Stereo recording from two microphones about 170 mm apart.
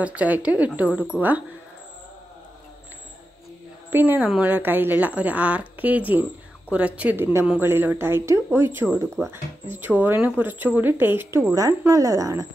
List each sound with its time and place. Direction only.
0.0 s speech: 10° right (ahead or behind)
3.9 s speech: 10° right (ahead or behind)